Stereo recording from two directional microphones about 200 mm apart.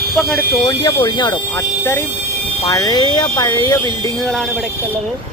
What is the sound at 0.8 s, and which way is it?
Speech, 20° left (ahead or behind).